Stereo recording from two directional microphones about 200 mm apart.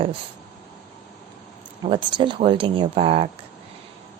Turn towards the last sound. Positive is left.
turn(degrees=-30)  # may be behind; listen again after turning